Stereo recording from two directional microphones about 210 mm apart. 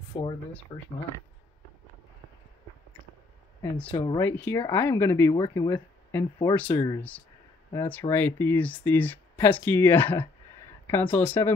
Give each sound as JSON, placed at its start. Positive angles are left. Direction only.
{"t": 0.1, "sound": "speech", "side_deg": 25}
{"t": 3.9, "sound": "speech", "side_deg": 20}
{"t": 4.2, "sound": "speech", "side_deg": 10}